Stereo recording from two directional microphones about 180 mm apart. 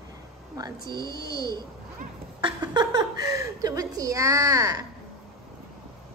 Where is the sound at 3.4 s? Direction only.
20° right (ahead or behind).